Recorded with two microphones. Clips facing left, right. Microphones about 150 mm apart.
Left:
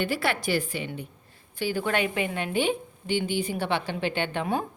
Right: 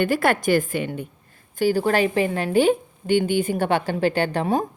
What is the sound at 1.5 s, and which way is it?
A woman's voice, 40° right (ahead or behind).